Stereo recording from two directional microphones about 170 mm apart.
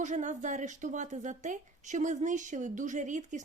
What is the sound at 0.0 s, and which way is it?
A woman's voice, 45° right (ahead or behind).